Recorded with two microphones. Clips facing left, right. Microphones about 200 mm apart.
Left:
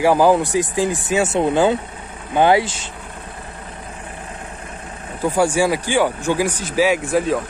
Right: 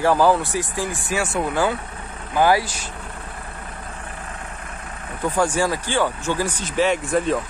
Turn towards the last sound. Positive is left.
turn(degrees=0)  # may be behind; listen again after turning